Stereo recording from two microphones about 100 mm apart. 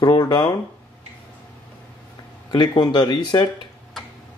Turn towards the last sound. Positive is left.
turn(degrees=50)  # may be behind; listen again after turning